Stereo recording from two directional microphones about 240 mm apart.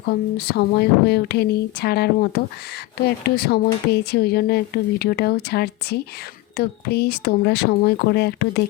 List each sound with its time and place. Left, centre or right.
0.1 s speech: left